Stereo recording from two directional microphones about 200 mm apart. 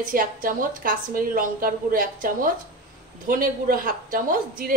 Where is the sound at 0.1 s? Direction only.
45° right (ahead or behind).